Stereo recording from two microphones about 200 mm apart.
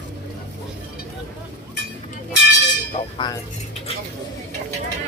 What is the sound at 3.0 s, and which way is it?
Speech, 30° left (ahead or behind).